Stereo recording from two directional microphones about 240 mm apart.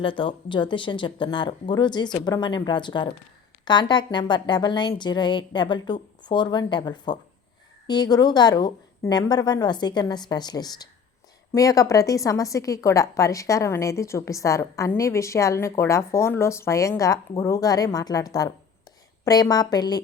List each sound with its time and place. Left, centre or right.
0.0 s a woman's voice: left